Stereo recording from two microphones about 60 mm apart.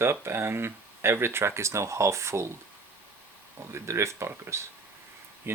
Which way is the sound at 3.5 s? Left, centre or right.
Right.